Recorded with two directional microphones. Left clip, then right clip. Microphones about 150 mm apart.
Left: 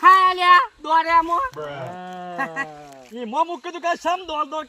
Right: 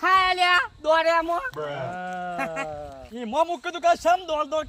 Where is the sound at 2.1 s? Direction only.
30° right (ahead or behind).